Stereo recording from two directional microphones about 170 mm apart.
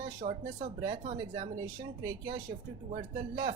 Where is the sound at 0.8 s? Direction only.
25° right (ahead or behind).